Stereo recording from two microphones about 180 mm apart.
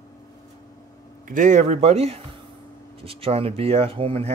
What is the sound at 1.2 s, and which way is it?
Speech, 45° right (ahead or behind).